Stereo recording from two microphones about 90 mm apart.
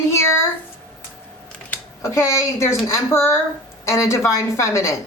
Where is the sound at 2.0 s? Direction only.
35° left (ahead or behind).